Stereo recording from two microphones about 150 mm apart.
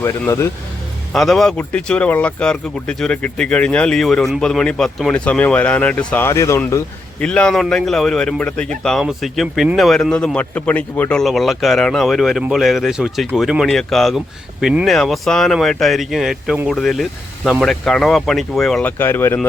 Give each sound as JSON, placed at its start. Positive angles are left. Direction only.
{"t": 0.0, "sound": "speech", "side_deg": 20}
{"t": 1.1, "sound": "speech", "side_deg": 0}
{"t": 6.2, "sound": "speech", "side_deg": 20}
{"t": 7.2, "sound": "a man's voice", "side_deg": 5}